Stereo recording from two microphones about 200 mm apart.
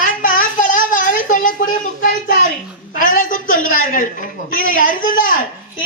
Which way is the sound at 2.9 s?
45° left (ahead or behind).